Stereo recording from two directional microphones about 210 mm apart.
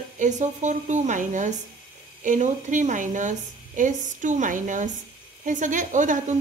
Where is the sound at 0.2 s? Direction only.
35° right (ahead or behind).